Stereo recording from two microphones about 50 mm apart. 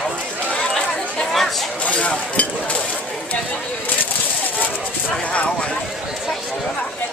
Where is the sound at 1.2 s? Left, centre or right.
Centre.